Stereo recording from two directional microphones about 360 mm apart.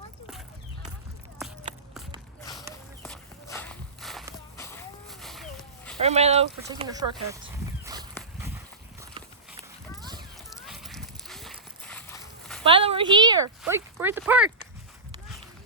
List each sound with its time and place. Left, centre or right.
2.4 s walk: centre
6.0 s speech: centre
8.2 s a sound: centre
10.0 s clip-clop: centre
10.5 s walk: centre
12.6 s speech: centre